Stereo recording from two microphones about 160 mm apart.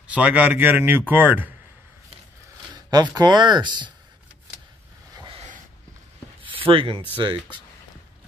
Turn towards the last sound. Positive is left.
turn(degrees=-30)  # may be behind; listen again after turning